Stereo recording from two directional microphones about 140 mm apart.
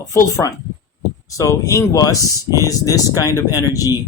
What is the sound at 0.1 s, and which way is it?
Speech, 20° left (ahead or behind).